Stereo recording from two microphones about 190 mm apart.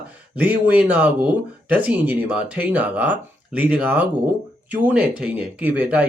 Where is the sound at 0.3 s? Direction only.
10° right (ahead or behind).